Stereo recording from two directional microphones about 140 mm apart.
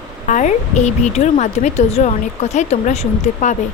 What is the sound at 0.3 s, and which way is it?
A woman's voice, 60° left (ahead or behind).